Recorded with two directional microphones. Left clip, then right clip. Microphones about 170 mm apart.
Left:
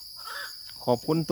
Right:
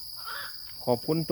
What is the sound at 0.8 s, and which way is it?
Speech, 35° left (ahead or behind).